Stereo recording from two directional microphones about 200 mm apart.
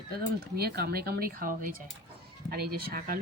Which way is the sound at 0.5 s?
50° right (ahead or behind).